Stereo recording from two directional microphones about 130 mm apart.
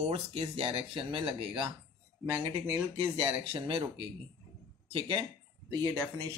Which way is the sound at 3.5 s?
45° right (ahead or behind).